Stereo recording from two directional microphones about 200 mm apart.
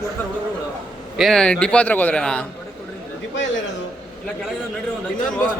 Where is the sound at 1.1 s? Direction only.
Centre (ahead or behind).